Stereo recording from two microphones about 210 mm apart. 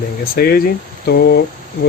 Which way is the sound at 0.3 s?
45° left (ahead or behind).